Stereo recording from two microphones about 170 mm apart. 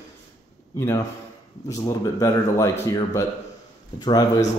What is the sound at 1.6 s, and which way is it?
A man's voice, 20° left (ahead or behind).